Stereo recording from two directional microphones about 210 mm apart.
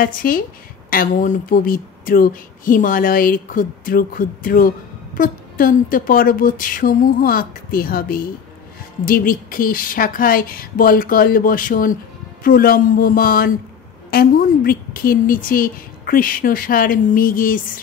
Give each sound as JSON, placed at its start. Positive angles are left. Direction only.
{"t": 0.0, "sound": "a woman's voice", "side_deg": 40}